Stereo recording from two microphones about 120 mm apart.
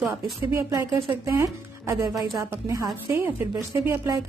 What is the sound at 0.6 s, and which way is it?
Speech, 25° right (ahead or behind).